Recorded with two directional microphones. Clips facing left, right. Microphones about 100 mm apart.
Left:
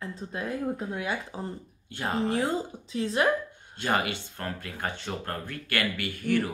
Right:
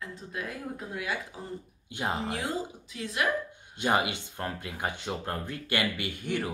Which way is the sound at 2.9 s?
30° left (ahead or behind).